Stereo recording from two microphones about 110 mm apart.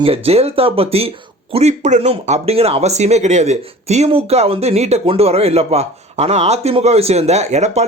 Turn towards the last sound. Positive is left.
turn(degrees=-90)